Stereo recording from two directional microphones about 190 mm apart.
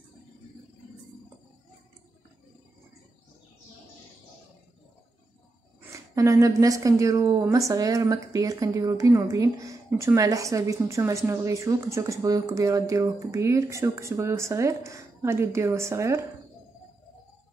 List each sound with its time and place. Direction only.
5.8 s a woman's voice: 15° right (ahead or behind)